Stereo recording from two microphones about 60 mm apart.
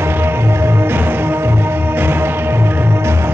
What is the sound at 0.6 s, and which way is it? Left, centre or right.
Music, right.